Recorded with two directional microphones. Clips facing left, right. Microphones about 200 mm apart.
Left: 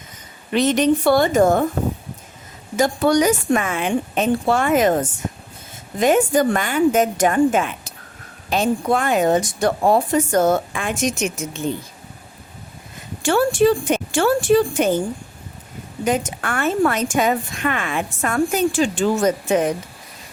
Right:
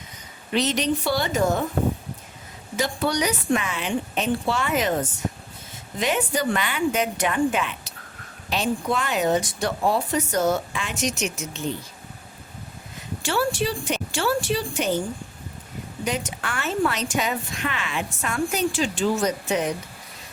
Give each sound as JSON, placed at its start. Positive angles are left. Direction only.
{"t": 0.5, "sound": "speech", "side_deg": 50}
{"t": 2.7, "sound": "speech", "side_deg": 45}
{"t": 13.2, "sound": "speech", "side_deg": 50}
{"t": 16.0, "sound": "speech", "side_deg": 50}